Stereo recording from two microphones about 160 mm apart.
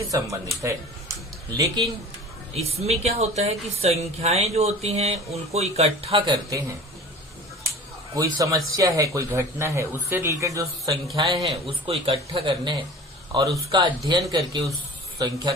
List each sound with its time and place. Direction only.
0.1 s speech: 20° right (ahead or behind)
2.6 s speech: 40° right (ahead or behind)
8.4 s speech: 20° right (ahead or behind)